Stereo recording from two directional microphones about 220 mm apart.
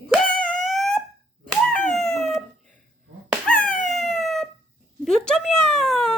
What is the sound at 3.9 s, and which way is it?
Cat, centre (ahead or behind).